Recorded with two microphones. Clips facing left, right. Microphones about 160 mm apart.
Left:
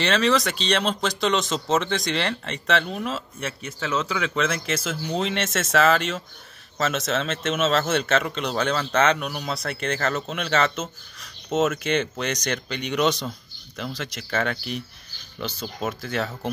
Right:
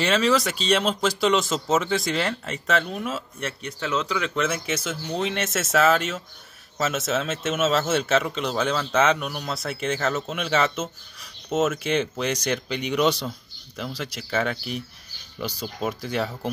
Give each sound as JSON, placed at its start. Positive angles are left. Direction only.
{"t": 0.0, "sound": "a man's voice", "side_deg": -5}
{"t": 16.0, "sound": "speech", "side_deg": -10}